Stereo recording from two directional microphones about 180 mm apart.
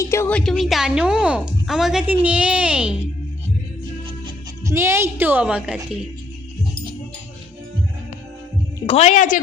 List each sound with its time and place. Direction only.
0.0 s a sound: 15° left (ahead or behind)
0.5 s a woman's voice: centre (ahead or behind)
4.6 s a woman's voice: 15° right (ahead or behind)
8.9 s speech: 40° left (ahead or behind)